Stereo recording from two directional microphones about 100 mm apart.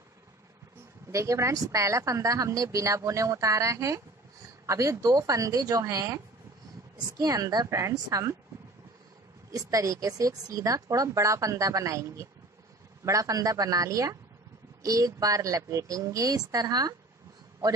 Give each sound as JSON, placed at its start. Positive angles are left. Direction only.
{"t": 1.1, "sound": "speech", "side_deg": -30}
{"t": 7.2, "sound": "speech", "side_deg": -40}
{"t": 9.5, "sound": "speech", "side_deg": -35}